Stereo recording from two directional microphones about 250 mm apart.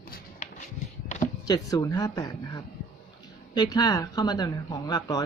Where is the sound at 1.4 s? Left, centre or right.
Centre.